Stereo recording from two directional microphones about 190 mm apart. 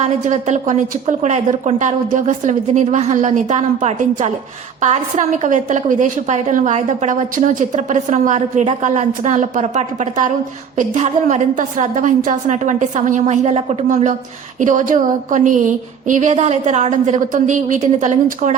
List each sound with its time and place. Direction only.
0.0 s a woman's voice: 40° right (ahead or behind)